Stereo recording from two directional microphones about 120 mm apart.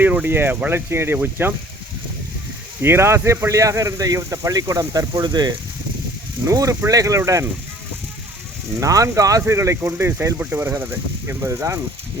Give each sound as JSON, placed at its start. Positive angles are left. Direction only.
{"t": 0.0, "sound": "speech", "side_deg": -15}
{"t": 2.8, "sound": "speech", "side_deg": -20}
{"t": 8.8, "sound": "speech", "side_deg": -30}